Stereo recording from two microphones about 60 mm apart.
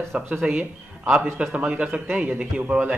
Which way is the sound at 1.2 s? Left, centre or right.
Right.